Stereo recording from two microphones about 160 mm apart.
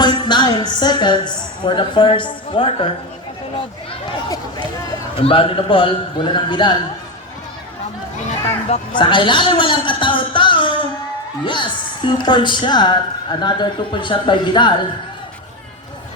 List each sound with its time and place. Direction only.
0.0 s a woman's voice: 30° left (ahead or behind)
5.1 s a man's voice: 35° left (ahead or behind)
8.7 s a man's voice: 30° left (ahead or behind)